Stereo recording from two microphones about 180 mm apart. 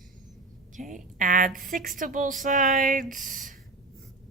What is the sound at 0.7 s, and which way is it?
A woman's voice, 45° right (ahead or behind).